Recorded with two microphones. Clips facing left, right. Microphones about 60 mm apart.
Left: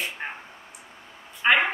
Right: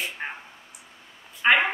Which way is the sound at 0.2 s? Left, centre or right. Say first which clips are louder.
Even; centre.